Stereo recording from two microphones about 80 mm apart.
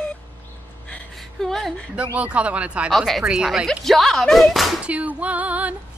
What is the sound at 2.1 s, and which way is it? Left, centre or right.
Speech, centre.